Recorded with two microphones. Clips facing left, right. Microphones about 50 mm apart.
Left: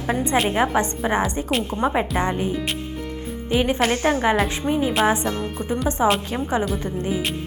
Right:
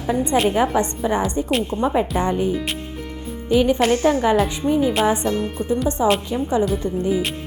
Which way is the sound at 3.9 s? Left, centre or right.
Left.